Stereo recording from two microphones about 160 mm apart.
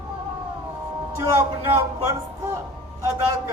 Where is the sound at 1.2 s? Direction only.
20° right (ahead or behind).